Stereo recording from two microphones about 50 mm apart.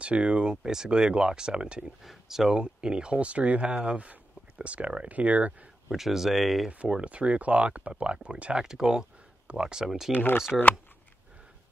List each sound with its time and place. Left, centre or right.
0.0 s speech: right
2.0 s speech: centre
2.5 s speech: centre
5.9 s speech: centre
6.9 s speech: right
8.5 s speech: centre
10.1 s speech: left